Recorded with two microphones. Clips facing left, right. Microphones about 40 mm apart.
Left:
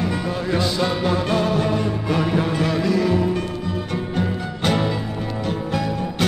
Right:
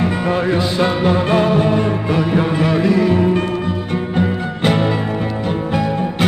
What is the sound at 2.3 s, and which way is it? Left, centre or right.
Music, centre.